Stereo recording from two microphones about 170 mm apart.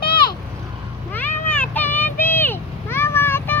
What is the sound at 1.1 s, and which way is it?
Cat, 10° left (ahead or behind).